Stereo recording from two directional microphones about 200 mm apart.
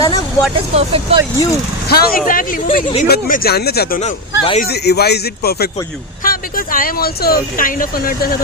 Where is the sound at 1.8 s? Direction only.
50° left (ahead or behind).